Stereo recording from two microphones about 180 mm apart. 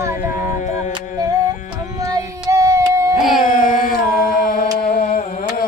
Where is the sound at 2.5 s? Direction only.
20° right (ahead or behind).